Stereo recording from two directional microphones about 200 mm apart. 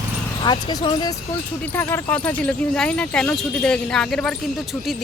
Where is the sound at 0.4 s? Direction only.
20° left (ahead or behind).